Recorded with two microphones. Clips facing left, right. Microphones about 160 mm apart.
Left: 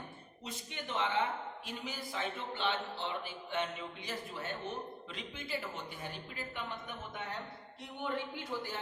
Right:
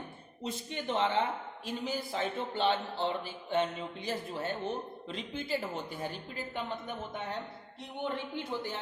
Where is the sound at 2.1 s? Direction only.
35° right (ahead or behind).